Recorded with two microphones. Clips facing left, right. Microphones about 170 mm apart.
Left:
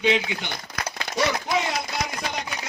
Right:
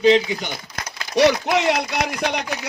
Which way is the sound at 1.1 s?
75° right (ahead or behind).